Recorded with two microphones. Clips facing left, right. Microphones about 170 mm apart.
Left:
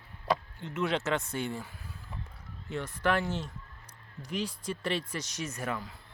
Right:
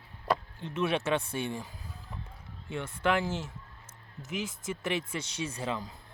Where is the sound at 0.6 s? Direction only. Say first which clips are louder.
Right 1 dB; 20° right (ahead or behind).